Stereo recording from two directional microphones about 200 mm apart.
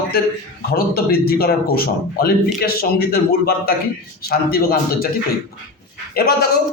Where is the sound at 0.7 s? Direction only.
50° left (ahead or behind).